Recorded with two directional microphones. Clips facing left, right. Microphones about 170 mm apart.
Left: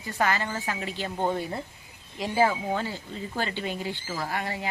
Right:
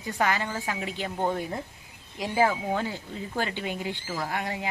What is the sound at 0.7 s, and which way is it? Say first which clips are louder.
Speech: even; 15° right (ahead or behind).